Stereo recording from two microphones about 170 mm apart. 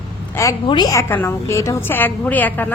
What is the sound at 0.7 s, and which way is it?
Speech, 25° left (ahead or behind).